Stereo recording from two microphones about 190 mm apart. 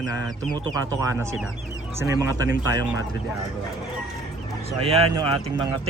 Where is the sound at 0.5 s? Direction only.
20° right (ahead or behind).